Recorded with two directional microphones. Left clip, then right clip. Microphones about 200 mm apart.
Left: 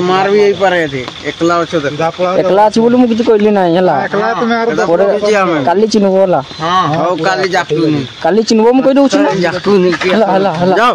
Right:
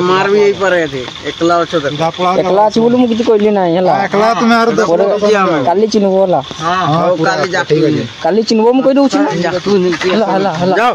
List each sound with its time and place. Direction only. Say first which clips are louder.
0.0 s speech: even; 25° left (ahead or behind)
2.5 s speech: left 3 dB; 10° left (ahead or behind)
4.2 s speech: right 3 dB; 55° right (ahead or behind)
5.3 s speech: even; 15° left (ahead or behind)
8.3 s speech: left 1 dB; 5° left (ahead or behind)
9.4 s speech: left 2 dB; 20° left (ahead or behind)
9.8 s speech: left 2 dB; 10° left (ahead or behind)